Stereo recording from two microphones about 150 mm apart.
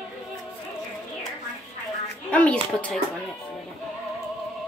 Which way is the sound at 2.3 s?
10° left (ahead or behind).